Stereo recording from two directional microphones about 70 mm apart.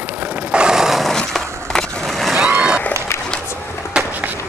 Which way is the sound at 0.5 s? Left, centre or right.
Centre.